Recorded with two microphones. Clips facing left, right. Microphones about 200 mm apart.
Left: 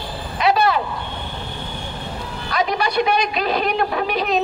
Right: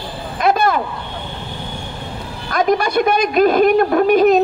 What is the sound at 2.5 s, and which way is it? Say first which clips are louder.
A woman's voice: right 5 dB; 50° right (ahead or behind).